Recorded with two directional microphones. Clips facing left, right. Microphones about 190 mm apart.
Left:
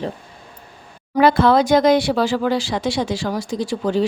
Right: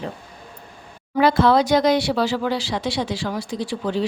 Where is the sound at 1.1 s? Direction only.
50° left (ahead or behind).